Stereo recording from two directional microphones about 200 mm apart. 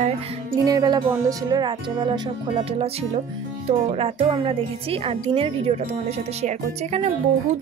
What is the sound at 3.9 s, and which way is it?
Speech, 25° right (ahead or behind).